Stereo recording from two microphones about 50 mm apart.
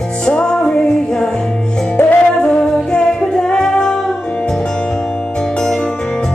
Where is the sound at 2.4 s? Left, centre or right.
Centre.